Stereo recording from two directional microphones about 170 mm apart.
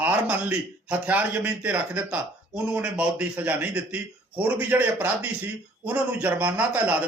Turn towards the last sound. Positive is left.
turn(degrees=-10)  # may be behind; listen again after turning